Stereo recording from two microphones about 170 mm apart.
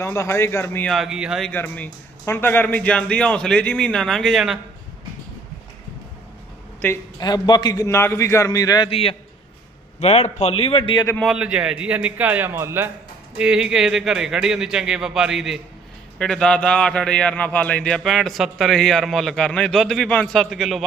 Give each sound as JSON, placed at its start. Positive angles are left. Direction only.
{"t": 0.0, "sound": "a man's voice", "side_deg": 15}
{"t": 0.9, "sound": "a man's voice", "side_deg": 0}
{"t": 1.5, "sound": "a man's voice", "side_deg": 10}
{"t": 6.8, "sound": "a man's voice", "side_deg": 20}
{"t": 8.9, "sound": "a man's voice", "side_deg": 35}
{"t": 11.2, "sound": "a man's voice", "side_deg": -5}
{"t": 13.4, "sound": "a man's voice", "side_deg": -5}